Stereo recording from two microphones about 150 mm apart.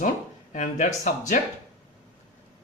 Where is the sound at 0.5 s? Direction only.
55° left (ahead or behind).